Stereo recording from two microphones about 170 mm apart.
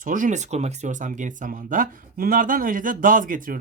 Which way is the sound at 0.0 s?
50° right (ahead or behind).